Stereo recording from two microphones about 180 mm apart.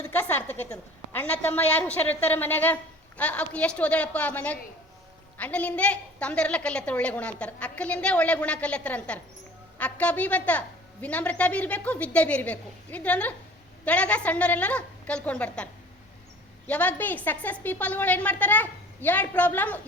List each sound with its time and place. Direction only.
0.1 s a woman's voice: 10° left (ahead or behind)